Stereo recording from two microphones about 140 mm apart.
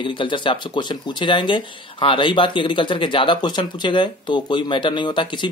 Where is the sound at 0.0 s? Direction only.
35° left (ahead or behind).